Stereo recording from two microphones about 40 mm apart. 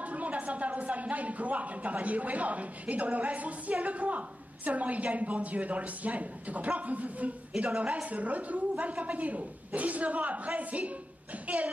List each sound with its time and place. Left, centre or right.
0.0 s a woman's voice: right